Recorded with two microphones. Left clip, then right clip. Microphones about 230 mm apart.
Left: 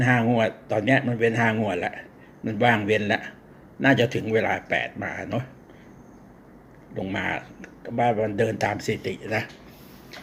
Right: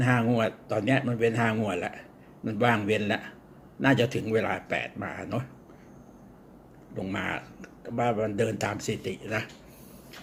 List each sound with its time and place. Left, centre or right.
0.0 s speech: centre
6.9 s speech: centre